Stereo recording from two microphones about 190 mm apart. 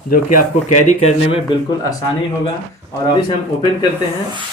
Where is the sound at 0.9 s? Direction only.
35° left (ahead or behind).